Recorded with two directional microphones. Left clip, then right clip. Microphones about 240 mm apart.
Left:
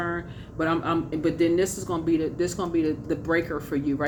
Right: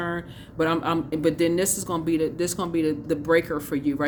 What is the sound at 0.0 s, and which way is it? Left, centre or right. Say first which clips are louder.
Speech: even; right.